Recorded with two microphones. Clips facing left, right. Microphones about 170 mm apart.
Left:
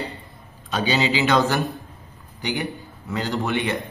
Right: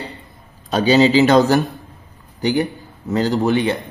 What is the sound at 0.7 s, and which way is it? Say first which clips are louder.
Speech: right 9 dB; 40° right (ahead or behind).